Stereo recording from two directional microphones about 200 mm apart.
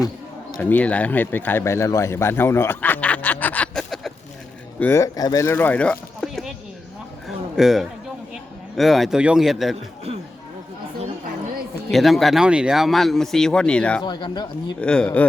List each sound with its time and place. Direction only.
0.5 s speech: 10° left (ahead or behind)
4.8 s speech: 10° left (ahead or behind)
7.3 s a sound: centre (ahead or behind)
8.7 s speech: centre (ahead or behind)
11.9 s speech: centre (ahead or behind)
14.0 s speech: 20° left (ahead or behind)
14.8 s speech: 5° left (ahead or behind)